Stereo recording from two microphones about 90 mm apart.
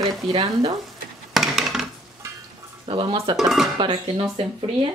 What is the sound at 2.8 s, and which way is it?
Speech, 60° right (ahead or behind).